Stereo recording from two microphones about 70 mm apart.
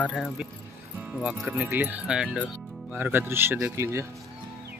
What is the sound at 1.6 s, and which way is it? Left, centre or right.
Speech, right.